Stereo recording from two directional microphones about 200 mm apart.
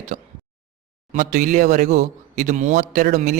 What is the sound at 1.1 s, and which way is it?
A man's voice, 40° right (ahead or behind).